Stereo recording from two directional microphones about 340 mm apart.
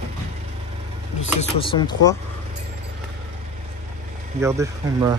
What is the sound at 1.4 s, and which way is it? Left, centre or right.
Speech, centre.